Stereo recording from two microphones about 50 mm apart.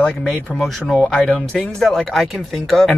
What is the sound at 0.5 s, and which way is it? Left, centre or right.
Speech, centre.